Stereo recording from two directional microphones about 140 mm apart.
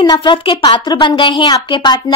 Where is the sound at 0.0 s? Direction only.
35° left (ahead or behind).